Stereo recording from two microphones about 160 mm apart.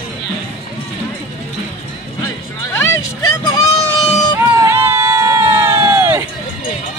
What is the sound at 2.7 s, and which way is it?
Vehicle, 20° left (ahead or behind).